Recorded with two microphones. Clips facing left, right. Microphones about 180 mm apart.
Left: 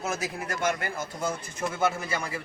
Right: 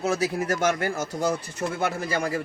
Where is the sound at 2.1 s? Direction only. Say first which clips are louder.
Right 6 dB; 40° right (ahead or behind).